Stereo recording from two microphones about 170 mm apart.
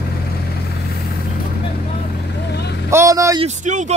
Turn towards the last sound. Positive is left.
turn(degrees=-45)  # may be behind; listen again after turning